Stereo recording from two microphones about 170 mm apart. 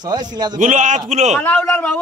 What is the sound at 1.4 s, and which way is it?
Speech, 10° left (ahead or behind).